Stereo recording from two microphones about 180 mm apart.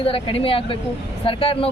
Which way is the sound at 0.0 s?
30° left (ahead or behind).